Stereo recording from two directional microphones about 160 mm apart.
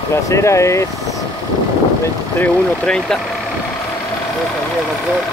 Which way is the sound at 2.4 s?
5° left (ahead or behind).